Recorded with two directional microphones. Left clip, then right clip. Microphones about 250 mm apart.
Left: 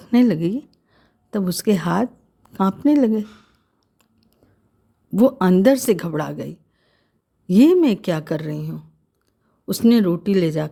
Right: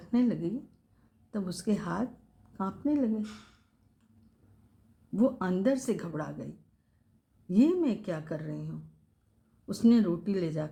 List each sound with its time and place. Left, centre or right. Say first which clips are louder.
0.0 s a woman's voice: left 12 dB; left
5.1 s a woman's voice: left 13 dB; left